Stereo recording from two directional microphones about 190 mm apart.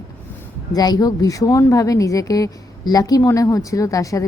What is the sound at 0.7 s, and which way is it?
A woman's voice, 20° left (ahead or behind).